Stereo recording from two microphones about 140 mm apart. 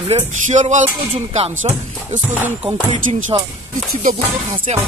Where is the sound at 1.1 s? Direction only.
45° right (ahead or behind).